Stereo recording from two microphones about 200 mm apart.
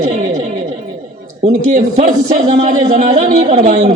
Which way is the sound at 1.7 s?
35° right (ahead or behind).